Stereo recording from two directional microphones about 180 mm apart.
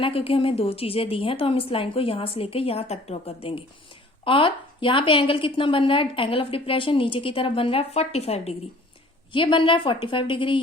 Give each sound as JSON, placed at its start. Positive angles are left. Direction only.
{"t": 0.0, "sound": "a woman's voice", "side_deg": 30}